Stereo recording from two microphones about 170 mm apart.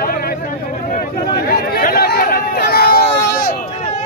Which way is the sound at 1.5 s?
65° left (ahead or behind).